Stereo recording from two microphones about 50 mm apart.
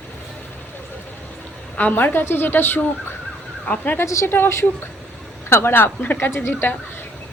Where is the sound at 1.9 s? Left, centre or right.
Left.